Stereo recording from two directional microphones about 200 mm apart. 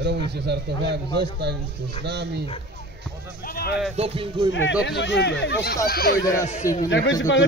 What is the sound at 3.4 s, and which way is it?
Speech, 50° left (ahead or behind).